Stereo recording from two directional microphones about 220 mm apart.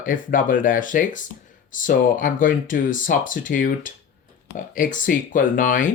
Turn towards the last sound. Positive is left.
turn(degrees=40)  # may be behind; listen again after turning